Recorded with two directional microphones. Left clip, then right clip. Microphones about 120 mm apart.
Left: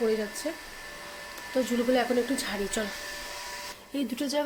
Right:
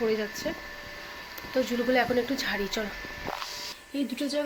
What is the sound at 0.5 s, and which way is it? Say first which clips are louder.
Speech: right 1 dB; 5° left (ahead or behind).